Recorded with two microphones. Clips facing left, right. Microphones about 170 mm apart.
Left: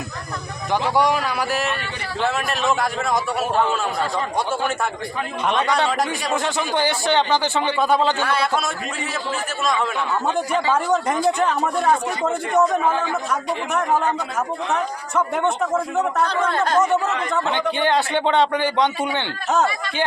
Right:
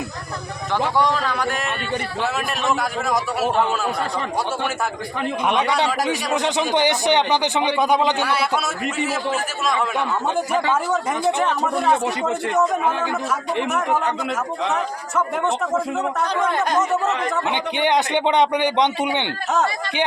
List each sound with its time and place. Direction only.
0.7 s a man's voice: 10° left (ahead or behind)
6.3 s speech: 20° right (ahead or behind)
10.3 s a man's voice: 5° right (ahead or behind)
14.7 s a man's voice: centre (ahead or behind)
16.2 s speech: 15° right (ahead or behind)